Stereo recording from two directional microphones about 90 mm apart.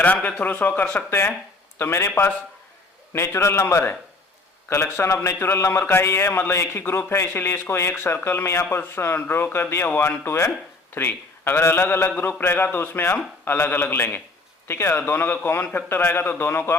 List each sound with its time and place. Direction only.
0.0 s a man's voice: 15° left (ahead or behind)